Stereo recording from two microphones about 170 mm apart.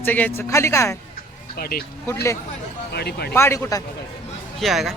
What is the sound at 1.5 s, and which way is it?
Speech, 65° left (ahead or behind).